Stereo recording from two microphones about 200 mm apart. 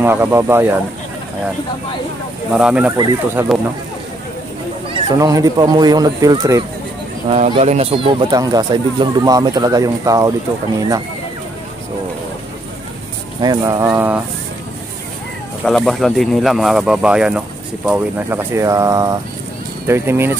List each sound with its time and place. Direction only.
0.0 s speech: 10° right (ahead or behind)
2.5 s speech: 5° right (ahead or behind)
3.0 s speech: 20° right (ahead or behind)
5.1 s speech: 15° right (ahead or behind)
7.2 s speech: 30° right (ahead or behind)
13.4 s speech: 20° right (ahead or behind)
15.6 s speech: centre (ahead or behind)